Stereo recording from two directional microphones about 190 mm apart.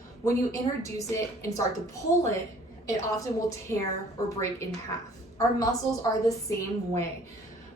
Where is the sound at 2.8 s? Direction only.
20° left (ahead or behind).